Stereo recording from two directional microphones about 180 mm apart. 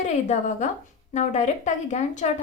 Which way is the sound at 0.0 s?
40° left (ahead or behind).